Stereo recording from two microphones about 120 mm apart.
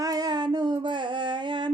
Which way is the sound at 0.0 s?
30° right (ahead or behind).